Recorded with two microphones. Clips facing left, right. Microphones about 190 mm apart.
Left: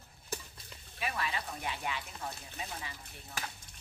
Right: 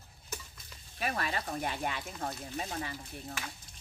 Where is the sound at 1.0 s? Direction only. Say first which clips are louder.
Right 3 dB; 45° right (ahead or behind).